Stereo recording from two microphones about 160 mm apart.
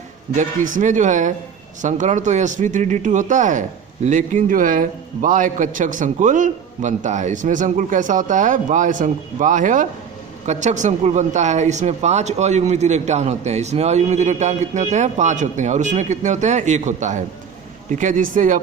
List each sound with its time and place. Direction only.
0.3 s speech: 50° right (ahead or behind)